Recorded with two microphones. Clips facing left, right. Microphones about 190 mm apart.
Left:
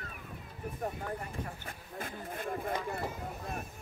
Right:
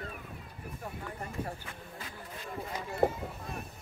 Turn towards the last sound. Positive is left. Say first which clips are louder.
# right 11 dB
turn(degrees=-55)  # may be behind; listen again after turning